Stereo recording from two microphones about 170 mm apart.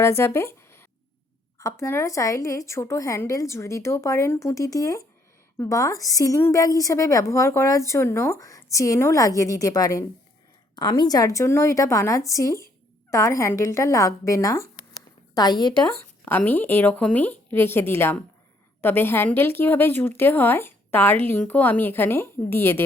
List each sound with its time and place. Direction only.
0.0 s a woman's voice: 15° left (ahead or behind)
16.2 s a woman's voice: 10° left (ahead or behind)